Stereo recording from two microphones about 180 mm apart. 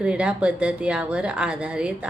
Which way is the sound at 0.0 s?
5° right (ahead or behind).